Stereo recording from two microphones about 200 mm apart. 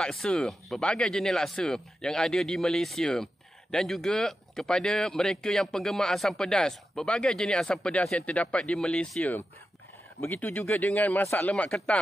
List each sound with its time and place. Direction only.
0.0 s speech: 5° left (ahead or behind)